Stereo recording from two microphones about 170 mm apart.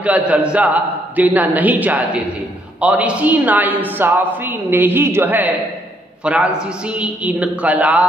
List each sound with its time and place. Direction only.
0.0 s a man's voice: 10° right (ahead or behind)